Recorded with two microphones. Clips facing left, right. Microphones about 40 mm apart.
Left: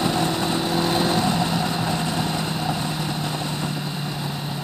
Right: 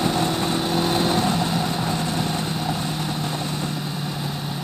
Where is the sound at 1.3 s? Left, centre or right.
Left.